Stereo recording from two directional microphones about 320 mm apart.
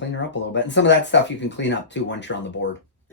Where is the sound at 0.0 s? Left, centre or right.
Left.